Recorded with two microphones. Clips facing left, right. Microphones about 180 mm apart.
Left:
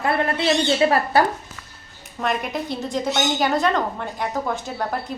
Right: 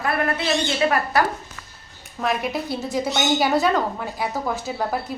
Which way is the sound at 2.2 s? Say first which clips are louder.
Right 1 dB; 5° right (ahead or behind).